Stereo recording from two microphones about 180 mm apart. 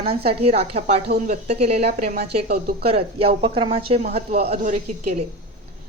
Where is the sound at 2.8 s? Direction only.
30° right (ahead or behind).